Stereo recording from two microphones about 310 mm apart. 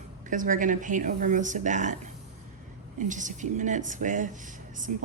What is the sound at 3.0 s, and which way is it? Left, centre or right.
Speech, right.